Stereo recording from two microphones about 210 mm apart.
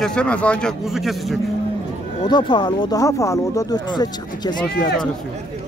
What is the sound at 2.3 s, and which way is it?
Speech, 20° left (ahead or behind).